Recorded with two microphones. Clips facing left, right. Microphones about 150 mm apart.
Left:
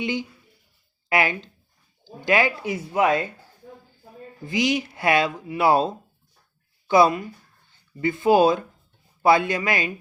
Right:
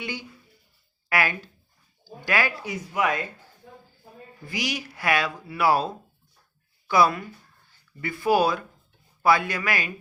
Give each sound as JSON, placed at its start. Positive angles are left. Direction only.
{"t": 0.0, "sound": "speech", "side_deg": 20}
{"t": 4.4, "sound": "speech", "side_deg": 20}